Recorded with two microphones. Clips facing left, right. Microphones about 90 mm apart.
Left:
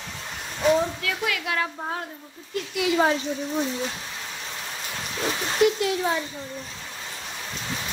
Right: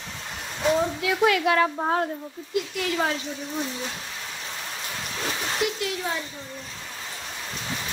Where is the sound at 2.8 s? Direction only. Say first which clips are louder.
Left 7 dB; 15° left (ahead or behind).